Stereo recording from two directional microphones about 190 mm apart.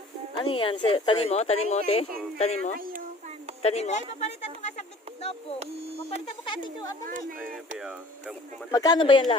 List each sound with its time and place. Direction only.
0.3 s speech: 25° left (ahead or behind)
2.7 s a sound: 50° right (ahead or behind)
3.6 s speech: 35° left (ahead or behind)
5.5 s speech: 30° right (ahead or behind)
6.2 s speech: 25° left (ahead or behind)
7.8 s speech: 5° right (ahead or behind)
8.7 s speech: 20° left (ahead or behind)